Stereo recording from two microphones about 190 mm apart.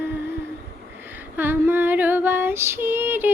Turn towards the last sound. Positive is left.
turn(degrees=-10)  # may be behind; listen again after turning